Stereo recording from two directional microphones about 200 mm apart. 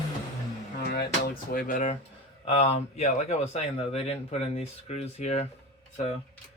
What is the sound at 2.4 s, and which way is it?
Speech, 30° left (ahead or behind).